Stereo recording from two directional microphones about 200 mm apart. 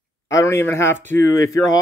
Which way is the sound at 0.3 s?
15° left (ahead or behind).